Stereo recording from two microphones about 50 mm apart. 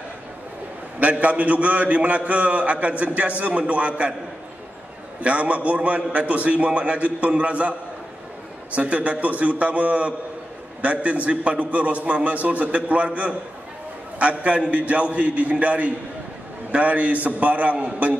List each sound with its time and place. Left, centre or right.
0.9 s a man's voice: right
5.2 s a man's voice: right
8.7 s a man's voice: right